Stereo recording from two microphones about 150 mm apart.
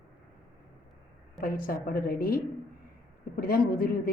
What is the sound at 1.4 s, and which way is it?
A woman's voice, 70° left (ahead or behind).